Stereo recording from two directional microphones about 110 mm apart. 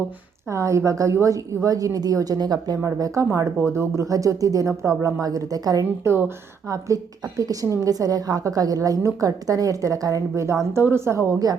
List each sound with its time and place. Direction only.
0.5 s a woman's voice: 25° right (ahead or behind)
6.1 s a woman's voice: 20° right (ahead or behind)